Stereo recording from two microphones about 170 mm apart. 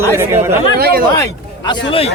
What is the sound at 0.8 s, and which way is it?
Speech, 65° right (ahead or behind).